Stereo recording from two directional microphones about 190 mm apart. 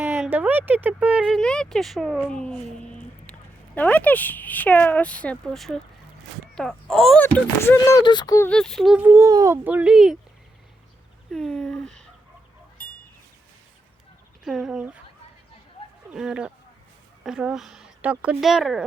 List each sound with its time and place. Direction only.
0.0 s speech: 10° right (ahead or behind); by 7.9 s 10° left (ahead or behind)
8.0 s speech: 20° left (ahead or behind)
8.4 s speech: 5° left (ahead or behind)
11.3 s a sound: centre (ahead or behind)
14.4 s speech: centre (ahead or behind)
16.0 s speech: 5° right (ahead or behind)